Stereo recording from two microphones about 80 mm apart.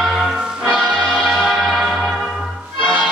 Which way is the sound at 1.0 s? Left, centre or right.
Centre.